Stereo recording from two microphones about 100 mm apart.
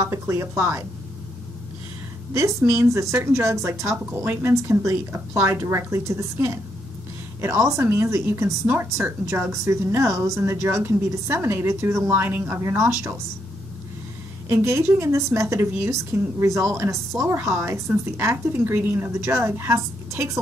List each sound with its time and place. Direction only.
0.0 s a woman's voice: 30° right (ahead or behind)
2.3 s a woman's voice: 30° right (ahead or behind)
14.5 s a woman's voice: 30° right (ahead or behind)